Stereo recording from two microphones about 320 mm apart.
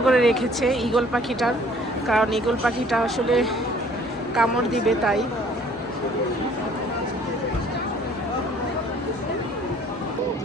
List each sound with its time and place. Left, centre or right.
0.0 s speech: centre